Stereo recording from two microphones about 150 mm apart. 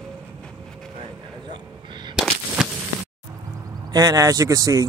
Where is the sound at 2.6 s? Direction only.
5° right (ahead or behind).